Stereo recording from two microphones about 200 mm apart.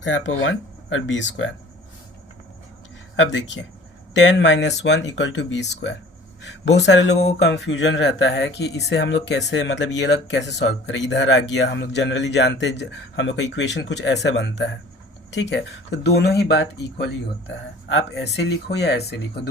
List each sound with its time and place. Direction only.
0.0 s speech: 65° left (ahead or behind)
3.2 s speech: 65° left (ahead or behind)